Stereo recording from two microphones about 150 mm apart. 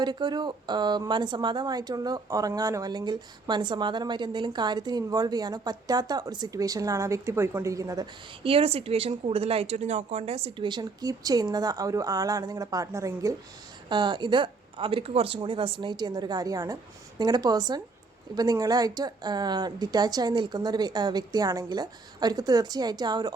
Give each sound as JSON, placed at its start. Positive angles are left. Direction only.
{"t": 0.0, "sound": "a woman's voice", "side_deg": -30}
{"t": 8.4, "sound": "a woman's voice", "side_deg": -40}
{"t": 13.9, "sound": "a woman's voice", "side_deg": -30}